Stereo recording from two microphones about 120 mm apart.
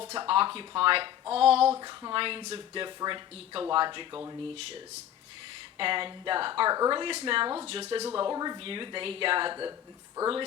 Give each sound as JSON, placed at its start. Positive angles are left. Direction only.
{"t": 0.2, "sound": "speech", "side_deg": -45}
{"t": 1.3, "sound": "a sound", "side_deg": -55}
{"t": 1.7, "sound": "speech", "side_deg": -30}
{"t": 2.1, "sound": "speech", "side_deg": -45}
{"t": 4.1, "sound": "speech", "side_deg": -25}
{"t": 5.7, "sound": "speech", "side_deg": -45}
{"t": 7.7, "sound": "speech", "side_deg": -55}
{"t": 8.1, "sound": "speech", "side_deg": -35}
{"t": 8.6, "sound": "speech", "side_deg": -45}